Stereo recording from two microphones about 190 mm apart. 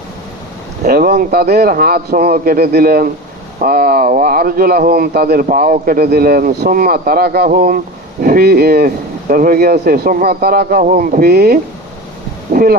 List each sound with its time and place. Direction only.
0.9 s speech: 55° right (ahead or behind); by 5.8 s 40° right (ahead or behind)
5.8 s speech: 50° right (ahead or behind)
12.5 s a sound: 50° right (ahead or behind)